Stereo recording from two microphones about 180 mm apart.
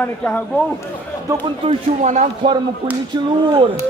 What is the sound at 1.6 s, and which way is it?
Speech, 35° right (ahead or behind).